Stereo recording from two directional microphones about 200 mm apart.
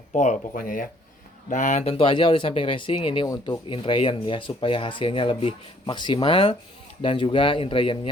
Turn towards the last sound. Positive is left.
turn(degrees=25)  # may be behind; listen again after turning